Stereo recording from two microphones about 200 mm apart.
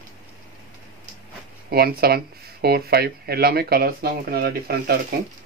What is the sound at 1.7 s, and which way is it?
Speech, 50° right (ahead or behind).